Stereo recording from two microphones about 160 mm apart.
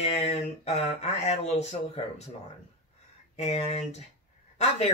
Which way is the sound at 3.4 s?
40° left (ahead or behind).